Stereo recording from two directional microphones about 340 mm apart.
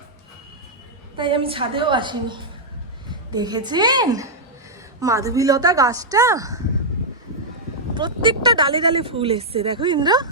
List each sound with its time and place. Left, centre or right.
1.1 s a woman's voice: centre
7.9 s speech: centre